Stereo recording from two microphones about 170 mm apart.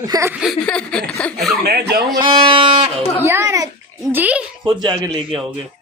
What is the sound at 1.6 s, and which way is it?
Speech, 70° right (ahead or behind).